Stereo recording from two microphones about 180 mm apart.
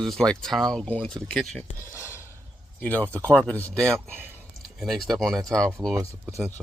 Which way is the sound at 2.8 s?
10° left (ahead or behind).